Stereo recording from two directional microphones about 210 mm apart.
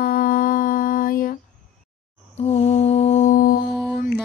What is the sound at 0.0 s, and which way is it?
Humming, 45° left (ahead or behind).